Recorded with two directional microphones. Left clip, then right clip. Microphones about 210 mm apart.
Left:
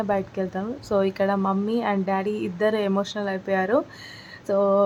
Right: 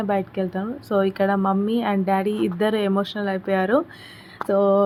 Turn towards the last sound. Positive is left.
turn(degrees=-10)  # may be behind; listen again after turning